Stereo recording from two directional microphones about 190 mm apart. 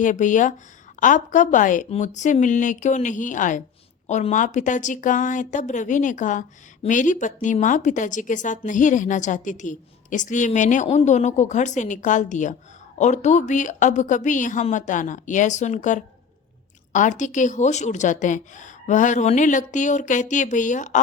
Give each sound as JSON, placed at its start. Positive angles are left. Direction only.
{"t": 0.0, "sound": "a woman's voice", "side_deg": 40}